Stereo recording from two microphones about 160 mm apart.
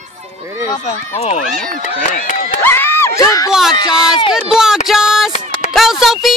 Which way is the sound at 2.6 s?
15° left (ahead or behind).